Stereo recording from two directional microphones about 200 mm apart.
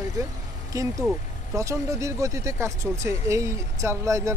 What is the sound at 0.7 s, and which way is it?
Speech, 15° right (ahead or behind).